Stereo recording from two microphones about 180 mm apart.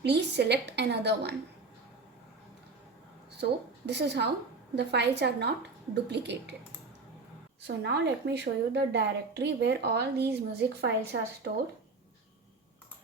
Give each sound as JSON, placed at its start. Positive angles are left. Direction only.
{"t": 0.0, "sound": "a woman's voice", "side_deg": -70}
{"t": 3.8, "sound": "a woman's voice", "side_deg": -70}
{"t": 7.8, "sound": "a woman's voice", "side_deg": -70}